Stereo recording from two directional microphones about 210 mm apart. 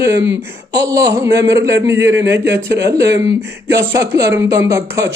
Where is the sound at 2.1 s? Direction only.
60° right (ahead or behind).